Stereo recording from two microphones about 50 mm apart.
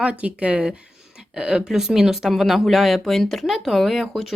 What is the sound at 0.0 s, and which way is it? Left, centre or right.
Speech, right.